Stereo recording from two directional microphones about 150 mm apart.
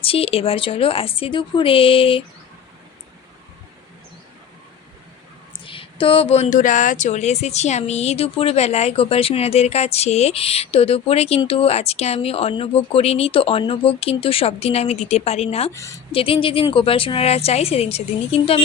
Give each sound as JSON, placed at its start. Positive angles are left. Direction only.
{"t": 0.0, "sound": "a woman's voice", "side_deg": 40}
{"t": 5.5, "sound": "speech", "side_deg": 35}
{"t": 15.7, "sound": "a woman's voice", "side_deg": 20}
{"t": 16.1, "sound": "a woman's voice", "side_deg": 40}